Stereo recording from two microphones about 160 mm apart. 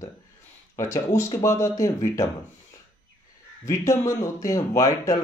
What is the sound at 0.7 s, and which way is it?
Speech, 20° left (ahead or behind).